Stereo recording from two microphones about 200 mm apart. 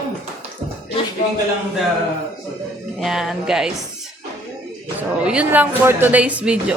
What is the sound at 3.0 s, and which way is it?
Speech, centre (ahead or behind).